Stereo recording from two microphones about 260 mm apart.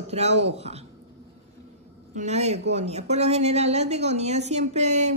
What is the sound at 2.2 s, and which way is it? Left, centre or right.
A woman's voice, right.